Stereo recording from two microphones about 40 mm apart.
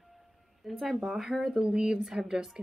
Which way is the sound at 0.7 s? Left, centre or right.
Centre.